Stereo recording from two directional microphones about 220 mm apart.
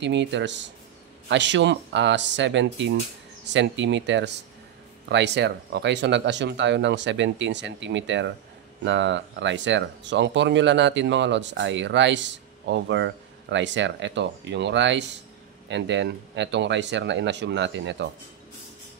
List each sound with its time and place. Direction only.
0.0 s speech: 55° right (ahead or behind)